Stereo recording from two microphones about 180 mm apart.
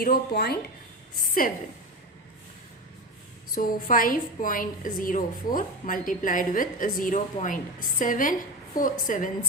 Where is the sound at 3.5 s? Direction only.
50° left (ahead or behind).